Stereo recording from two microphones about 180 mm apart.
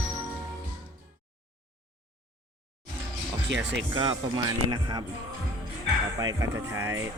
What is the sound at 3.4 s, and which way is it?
Speech, 75° right (ahead or behind).